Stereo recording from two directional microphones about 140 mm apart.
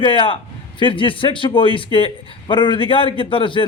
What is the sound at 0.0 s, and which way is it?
Speech, 35° left (ahead or behind).